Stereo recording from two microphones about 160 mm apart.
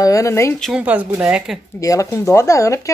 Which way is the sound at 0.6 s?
5° right (ahead or behind).